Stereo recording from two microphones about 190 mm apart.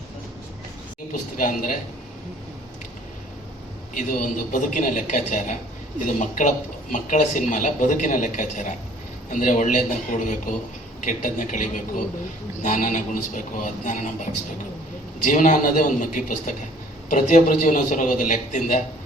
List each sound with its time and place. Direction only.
1.4 s speech: 45° left (ahead or behind)
3.9 s a man's voice: 45° left (ahead or behind)
15.2 s a man's voice: 45° left (ahead or behind)